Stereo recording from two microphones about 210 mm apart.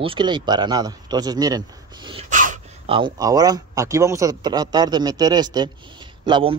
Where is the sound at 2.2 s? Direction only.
40° right (ahead or behind).